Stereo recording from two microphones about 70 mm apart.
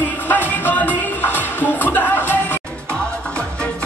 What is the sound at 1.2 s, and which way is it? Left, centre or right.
Music, left.